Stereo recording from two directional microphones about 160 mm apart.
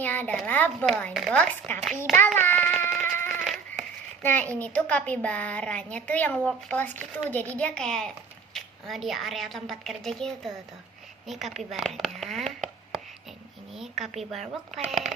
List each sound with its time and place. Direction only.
0.0 s a woman's voice: 10° left (ahead or behind)
2.1 s child singing: 15° left (ahead or behind)
3.0 s a sound: 15° left (ahead or behind)
3.4 s a sound: centre (ahead or behind)
4.2 s a woman's voice: 10° left (ahead or behind)
13.7 s a woman's voice: centre (ahead or behind)